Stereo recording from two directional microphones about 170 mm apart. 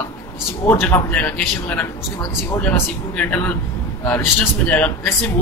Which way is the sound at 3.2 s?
10° left (ahead or behind).